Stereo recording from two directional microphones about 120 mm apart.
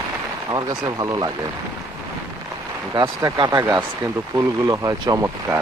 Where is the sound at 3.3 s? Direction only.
35° right (ahead or behind).